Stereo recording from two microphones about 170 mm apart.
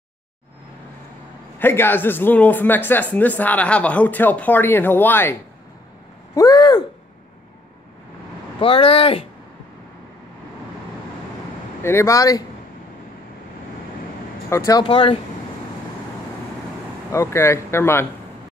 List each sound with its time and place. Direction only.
1.6 s speech: 15° left (ahead or behind)
6.3 s a sound: 25° left (ahead or behind)
8.5 s speech: 30° left (ahead or behind)
11.8 s speech: 15° left (ahead or behind)
14.5 s speech: 20° left (ahead or behind)
14.9 s speech: 35° left (ahead or behind)
17.1 s speech: 15° left (ahead or behind)